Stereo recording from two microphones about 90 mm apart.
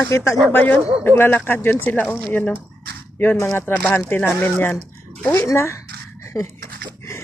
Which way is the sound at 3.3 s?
35° left (ahead or behind).